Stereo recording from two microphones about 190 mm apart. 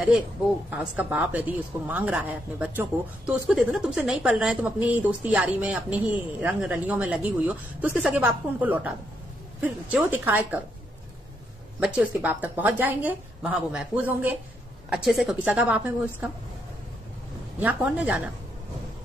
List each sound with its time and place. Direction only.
0.7 s a woman's voice: 10° right (ahead or behind)
11.8 s a woman's voice: 5° right (ahead or behind)
17.6 s a woman's voice: 10° right (ahead or behind)